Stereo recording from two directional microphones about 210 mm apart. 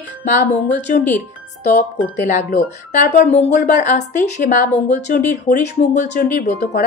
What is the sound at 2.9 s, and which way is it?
A woman's voice, 35° left (ahead or behind).